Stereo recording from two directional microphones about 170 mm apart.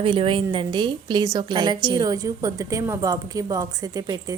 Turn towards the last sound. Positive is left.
turn(degrees=-20)  # may be behind; listen again after turning